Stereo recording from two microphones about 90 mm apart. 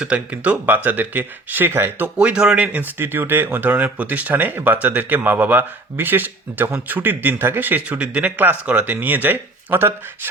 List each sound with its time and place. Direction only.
0.0 s speech: 15° right (ahead or behind)
2.1 s speech: 10° right (ahead or behind)